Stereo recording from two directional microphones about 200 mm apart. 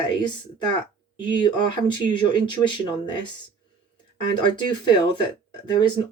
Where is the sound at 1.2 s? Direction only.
25° left (ahead or behind).